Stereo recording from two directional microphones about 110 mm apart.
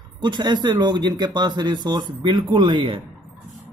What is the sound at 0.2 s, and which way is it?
Speech, 40° right (ahead or behind).